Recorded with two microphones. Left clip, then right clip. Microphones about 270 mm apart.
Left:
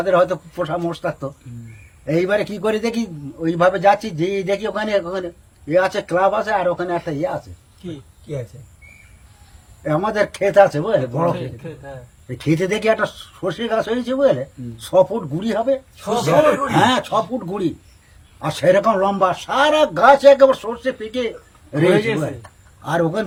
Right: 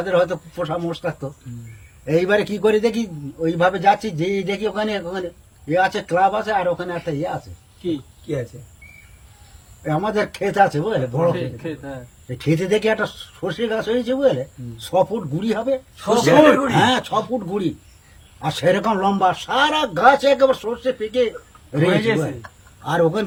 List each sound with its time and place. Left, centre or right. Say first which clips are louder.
0.0 s a man's voice: left 3 dB; centre
9.8 s speech: left 2 dB; centre
11.5 s a man's voice: right 4 dB; left
12.4 s a man's voice: even; centre
16.0 s a man's voice: right 4 dB; left
16.7 s a man's voice: left 1 dB; centre
18.4 s a man's voice: left 3 dB; centre
21.9 s a man's voice: left 1 dB; left
22.8 s a man's voice: right 1 dB; centre